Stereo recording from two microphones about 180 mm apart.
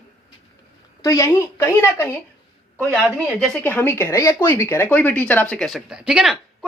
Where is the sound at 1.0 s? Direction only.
20° left (ahead or behind).